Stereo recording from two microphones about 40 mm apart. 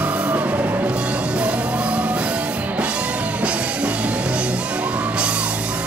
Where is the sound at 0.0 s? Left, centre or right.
Right.